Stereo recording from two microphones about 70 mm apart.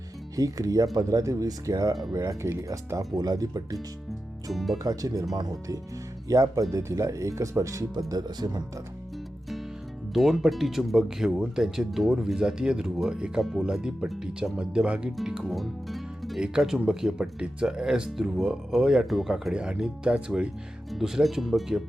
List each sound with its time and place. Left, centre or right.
0.3 s speech: right
2.1 s speech: right
4.5 s speech: centre
4.8 s speech: right
7.9 s speech: right
10.2 s speech: centre
13.4 s speech: centre
15.1 s music: centre
16.4 s speech: centre
19.3 s speech: centre